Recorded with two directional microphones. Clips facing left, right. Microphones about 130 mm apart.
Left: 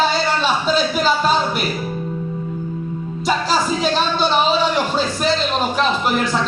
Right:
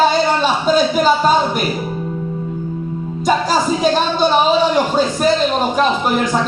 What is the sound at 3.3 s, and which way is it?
Speech, 45° right (ahead or behind).